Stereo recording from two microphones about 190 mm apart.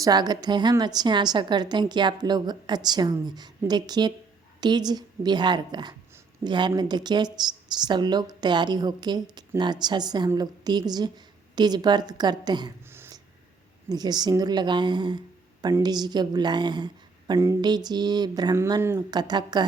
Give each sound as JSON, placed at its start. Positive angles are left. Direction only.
{"t": 0.0, "sound": "speech", "side_deg": -20}
{"t": 12.9, "sound": "a sound", "side_deg": -10}
{"t": 13.9, "sound": "speech", "side_deg": -20}